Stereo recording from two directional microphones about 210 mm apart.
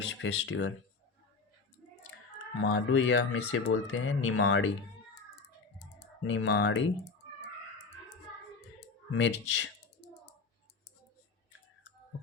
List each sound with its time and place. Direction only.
0.1 s speech: 65° left (ahead or behind)
2.1 s a sound: 65° left (ahead or behind)
2.6 s speech: 60° left (ahead or behind)
6.2 s speech: 60° left (ahead or behind)
9.1 s speech: 60° left (ahead or behind)